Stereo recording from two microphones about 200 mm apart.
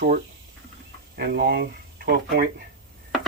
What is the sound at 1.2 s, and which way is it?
Speech, 50° right (ahead or behind).